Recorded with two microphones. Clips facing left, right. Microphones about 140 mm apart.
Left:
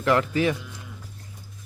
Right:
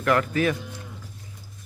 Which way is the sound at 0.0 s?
25° left (ahead or behind).